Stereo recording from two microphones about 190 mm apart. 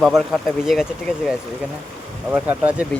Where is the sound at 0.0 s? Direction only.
Centre (ahead or behind).